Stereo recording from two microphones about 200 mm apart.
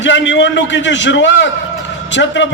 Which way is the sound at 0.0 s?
65° left (ahead or behind).